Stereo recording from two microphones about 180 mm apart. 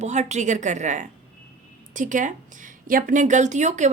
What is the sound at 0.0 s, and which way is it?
A woman's voice, 40° right (ahead or behind).